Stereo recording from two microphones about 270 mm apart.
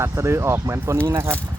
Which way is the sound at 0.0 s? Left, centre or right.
Centre.